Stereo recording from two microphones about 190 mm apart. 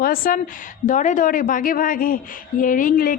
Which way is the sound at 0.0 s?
50° left (ahead or behind).